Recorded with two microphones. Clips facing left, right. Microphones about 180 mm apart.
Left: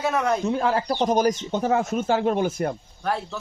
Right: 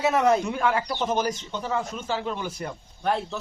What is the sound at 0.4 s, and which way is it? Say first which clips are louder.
Speech: left 3 dB; 35° left (ahead or behind).